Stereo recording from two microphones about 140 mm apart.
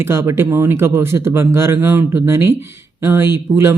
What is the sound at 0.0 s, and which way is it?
A man's voice, 20° right (ahead or behind).